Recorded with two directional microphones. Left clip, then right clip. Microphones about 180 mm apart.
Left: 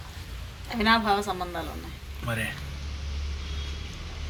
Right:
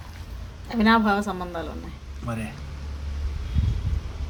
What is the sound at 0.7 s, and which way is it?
Speech, 45° right (ahead or behind).